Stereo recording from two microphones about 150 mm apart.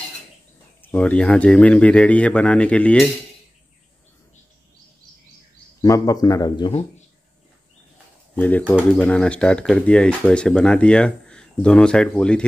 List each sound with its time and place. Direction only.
0.8 s speech: 10° left (ahead or behind)
5.8 s a man's voice: 20° left (ahead or behind)
8.4 s speech: 10° left (ahead or behind)